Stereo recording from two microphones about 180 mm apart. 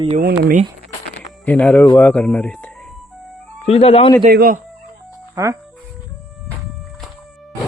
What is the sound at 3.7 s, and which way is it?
Speech, 35° left (ahead or behind).